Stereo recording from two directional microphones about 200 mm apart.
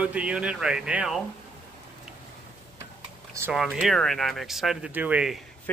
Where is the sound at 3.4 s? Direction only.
5° right (ahead or behind).